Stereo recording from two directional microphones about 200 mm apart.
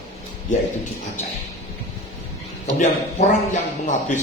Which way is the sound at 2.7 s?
35° left (ahead or behind).